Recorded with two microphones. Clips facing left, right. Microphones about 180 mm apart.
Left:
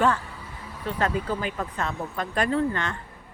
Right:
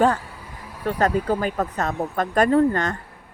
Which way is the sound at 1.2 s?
50° right (ahead or behind).